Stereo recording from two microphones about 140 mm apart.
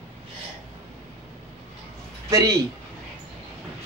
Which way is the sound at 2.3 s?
20° right (ahead or behind).